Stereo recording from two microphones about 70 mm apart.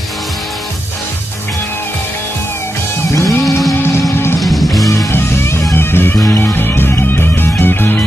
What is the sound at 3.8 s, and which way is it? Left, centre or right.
Music, left.